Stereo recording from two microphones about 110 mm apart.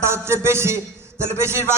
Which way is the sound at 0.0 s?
25° right (ahead or behind).